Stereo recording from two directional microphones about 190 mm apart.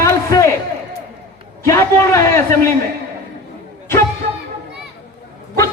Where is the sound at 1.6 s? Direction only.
15° left (ahead or behind).